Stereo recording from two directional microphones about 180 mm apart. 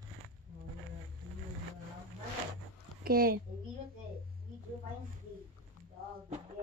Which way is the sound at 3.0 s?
55° right (ahead or behind).